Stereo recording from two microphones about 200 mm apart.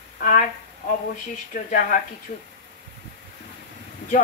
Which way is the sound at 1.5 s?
40° left (ahead or behind).